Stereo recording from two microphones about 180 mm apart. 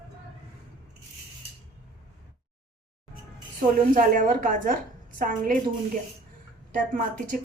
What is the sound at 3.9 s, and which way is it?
Speech, 50° right (ahead or behind).